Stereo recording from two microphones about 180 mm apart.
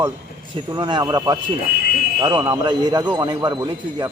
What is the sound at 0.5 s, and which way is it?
A man's voice, 25° right (ahead or behind).